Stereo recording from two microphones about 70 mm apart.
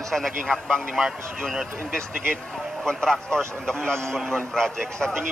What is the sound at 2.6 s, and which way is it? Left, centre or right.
Vehicle, centre.